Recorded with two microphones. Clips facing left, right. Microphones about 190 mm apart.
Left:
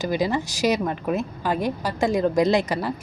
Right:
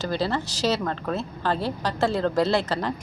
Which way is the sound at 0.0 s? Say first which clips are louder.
Left 3 dB; 15° left (ahead or behind).